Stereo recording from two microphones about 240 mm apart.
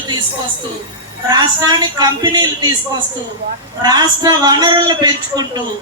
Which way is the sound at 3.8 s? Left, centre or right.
Centre.